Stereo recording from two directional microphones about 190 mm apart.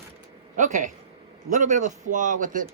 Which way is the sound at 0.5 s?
40° right (ahead or behind).